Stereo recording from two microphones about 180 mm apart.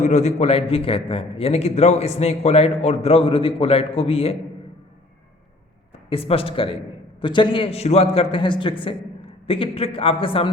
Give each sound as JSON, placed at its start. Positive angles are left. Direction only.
{"t": 0.0, "sound": "a man's voice", "side_deg": 40}
{"t": 6.1, "sound": "a man's voice", "side_deg": 30}